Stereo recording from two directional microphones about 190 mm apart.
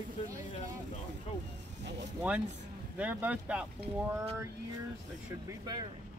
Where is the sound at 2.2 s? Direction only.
5° right (ahead or behind).